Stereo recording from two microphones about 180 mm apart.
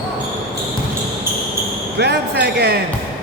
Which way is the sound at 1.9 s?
65° right (ahead or behind).